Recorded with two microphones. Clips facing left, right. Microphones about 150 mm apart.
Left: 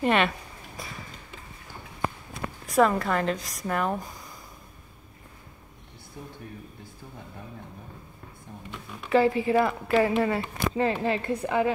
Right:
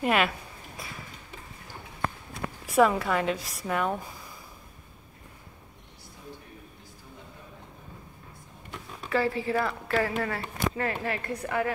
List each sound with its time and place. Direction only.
0.0 s speech: 5° right (ahead or behind)
0.8 s a sound: centre (ahead or behind)
2.6 s speech: 5° right (ahead or behind)
9.1 s speech: 20° left (ahead or behind)